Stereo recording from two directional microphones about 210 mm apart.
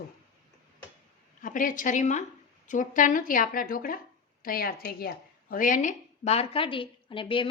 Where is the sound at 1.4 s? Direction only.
40° left (ahead or behind).